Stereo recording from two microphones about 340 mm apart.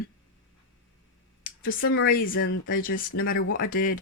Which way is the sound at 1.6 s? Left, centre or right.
Left.